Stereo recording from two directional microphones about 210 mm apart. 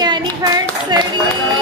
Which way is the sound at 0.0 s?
20° right (ahead or behind).